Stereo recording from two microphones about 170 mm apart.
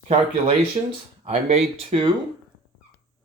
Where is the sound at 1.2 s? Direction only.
35° right (ahead or behind).